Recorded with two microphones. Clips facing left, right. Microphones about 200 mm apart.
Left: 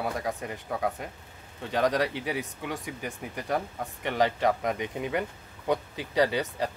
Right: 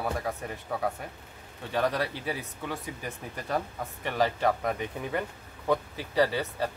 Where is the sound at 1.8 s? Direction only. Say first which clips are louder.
Left 3 dB; 15° left (ahead or behind).